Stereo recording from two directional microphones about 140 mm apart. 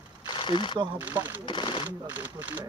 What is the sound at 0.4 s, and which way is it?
Speech, 35° left (ahead or behind).